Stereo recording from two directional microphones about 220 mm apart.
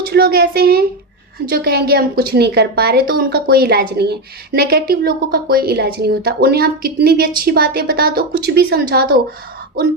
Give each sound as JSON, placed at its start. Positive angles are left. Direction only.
{"t": 0.1, "sound": "a woman's voice", "side_deg": -45}